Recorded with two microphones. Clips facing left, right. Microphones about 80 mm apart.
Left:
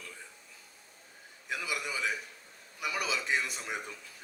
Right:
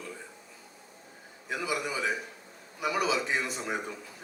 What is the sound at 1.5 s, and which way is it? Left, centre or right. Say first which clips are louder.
A man's voice: right 4 dB; right.